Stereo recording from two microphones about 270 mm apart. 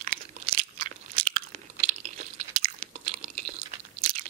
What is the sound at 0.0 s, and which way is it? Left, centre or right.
Crunch, right.